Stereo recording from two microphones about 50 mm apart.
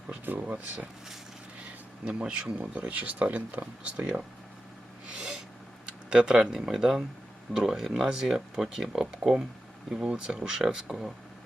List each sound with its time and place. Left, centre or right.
0.3 s speech: right
2.0 s speech: centre
3.6 s speech: centre
5.1 s a sound: centre
5.8 s speech: right